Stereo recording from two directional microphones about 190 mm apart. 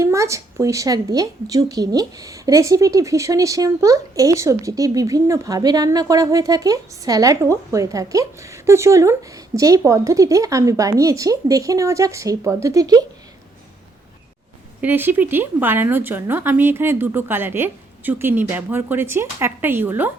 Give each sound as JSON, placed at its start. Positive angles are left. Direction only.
{"t": 0.0, "sound": "a woman's voice", "side_deg": -15}
{"t": 14.8, "sound": "a woman's voice", "side_deg": -10}